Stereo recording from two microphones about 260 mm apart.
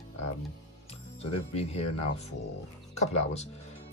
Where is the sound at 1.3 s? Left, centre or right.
Left.